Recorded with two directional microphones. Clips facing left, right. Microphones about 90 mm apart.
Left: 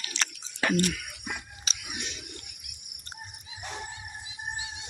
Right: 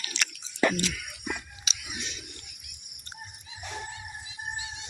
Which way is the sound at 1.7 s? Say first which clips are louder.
Even; 40° left (ahead or behind).